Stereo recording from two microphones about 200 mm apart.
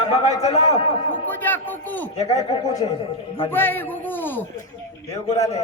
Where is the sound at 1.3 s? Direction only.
10° left (ahead or behind).